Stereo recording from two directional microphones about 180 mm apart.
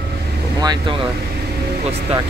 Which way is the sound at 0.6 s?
25° right (ahead or behind).